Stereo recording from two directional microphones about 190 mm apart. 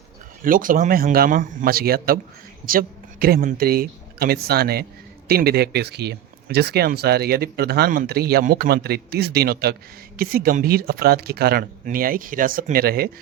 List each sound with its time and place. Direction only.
0.4 s speech: 45° right (ahead or behind)